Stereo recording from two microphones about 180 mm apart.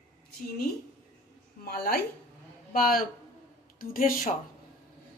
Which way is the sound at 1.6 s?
55° left (ahead or behind).